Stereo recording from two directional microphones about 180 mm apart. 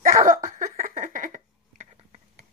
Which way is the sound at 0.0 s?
45° right (ahead or behind).